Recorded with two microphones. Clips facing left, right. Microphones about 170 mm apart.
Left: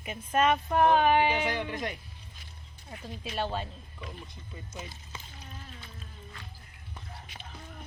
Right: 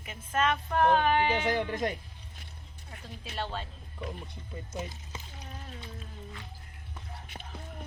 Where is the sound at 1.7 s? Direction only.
45° right (ahead or behind).